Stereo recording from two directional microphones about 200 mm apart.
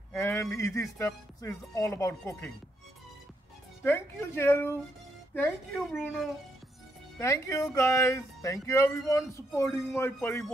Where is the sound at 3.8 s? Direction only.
10° left (ahead or behind).